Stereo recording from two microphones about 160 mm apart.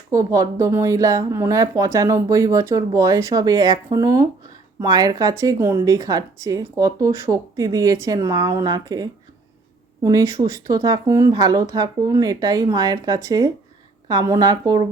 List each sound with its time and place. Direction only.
0.1 s speech: 20° right (ahead or behind)